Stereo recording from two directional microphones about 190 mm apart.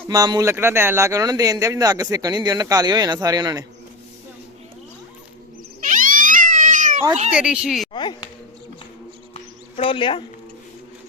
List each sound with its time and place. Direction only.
0.1 s speech: 20° right (ahead or behind)
5.8 s cat: 45° right (ahead or behind)
7.3 s speech: 5° right (ahead or behind)
9.3 s a sound: 30° left (ahead or behind)